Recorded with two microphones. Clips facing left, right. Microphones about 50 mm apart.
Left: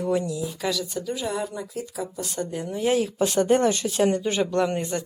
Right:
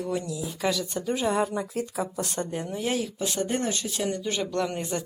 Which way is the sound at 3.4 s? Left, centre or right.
Left.